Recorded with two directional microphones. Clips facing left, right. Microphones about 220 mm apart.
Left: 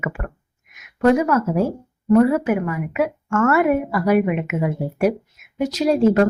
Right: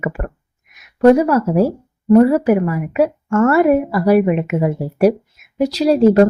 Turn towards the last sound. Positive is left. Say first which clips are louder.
# right 5 dB
turn(degrees=-35)  # may be behind; listen again after turning